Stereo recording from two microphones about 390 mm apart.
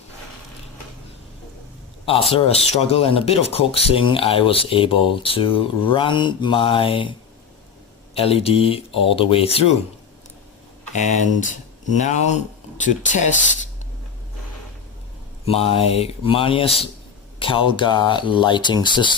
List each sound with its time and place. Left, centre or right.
2.3 s speech: centre
8.1 s speech: centre
10.9 s speech: centre
15.4 s speech: centre